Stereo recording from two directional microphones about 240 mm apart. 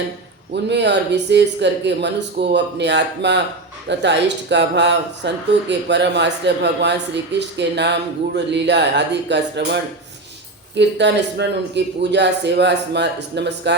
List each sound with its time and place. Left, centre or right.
0.5 s speech: right